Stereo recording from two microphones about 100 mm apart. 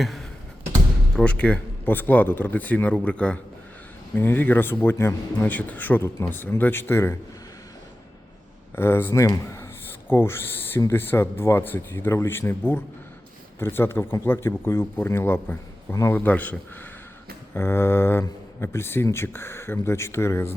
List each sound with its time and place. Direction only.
0.0 s a sound: centre (ahead or behind)
1.1 s speech: 10° left (ahead or behind)
8.7 s speech: 25° left (ahead or behind)